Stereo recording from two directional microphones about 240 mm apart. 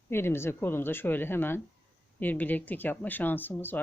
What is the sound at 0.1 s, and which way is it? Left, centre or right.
Speech, centre.